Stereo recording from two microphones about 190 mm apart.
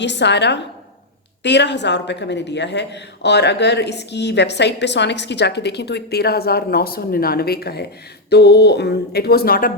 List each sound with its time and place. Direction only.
0.0 s speech: 65° left (ahead or behind); by 9.7 s 50° left (ahead or behind)